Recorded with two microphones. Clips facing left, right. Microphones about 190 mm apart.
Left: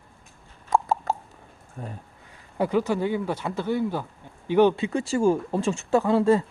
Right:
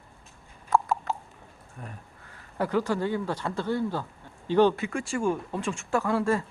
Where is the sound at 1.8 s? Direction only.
30° left (ahead or behind).